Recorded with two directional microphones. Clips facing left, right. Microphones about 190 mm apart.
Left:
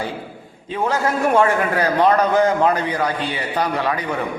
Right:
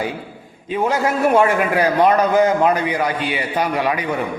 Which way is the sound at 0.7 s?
10° right (ahead or behind).